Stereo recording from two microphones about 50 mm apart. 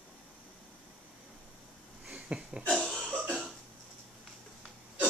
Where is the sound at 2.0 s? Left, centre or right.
Right.